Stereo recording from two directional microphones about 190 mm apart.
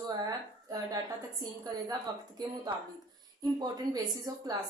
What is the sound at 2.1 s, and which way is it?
Speech, 25° right (ahead or behind).